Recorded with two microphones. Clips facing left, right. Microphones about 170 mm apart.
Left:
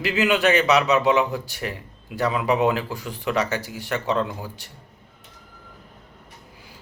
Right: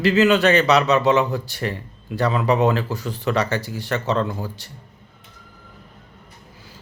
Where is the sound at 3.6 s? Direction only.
35° right (ahead or behind).